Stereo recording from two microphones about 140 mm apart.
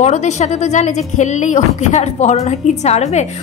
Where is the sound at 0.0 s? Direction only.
55° left (ahead or behind).